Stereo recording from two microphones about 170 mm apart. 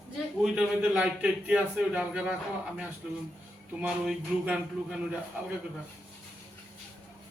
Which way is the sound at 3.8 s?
5° right (ahead or behind).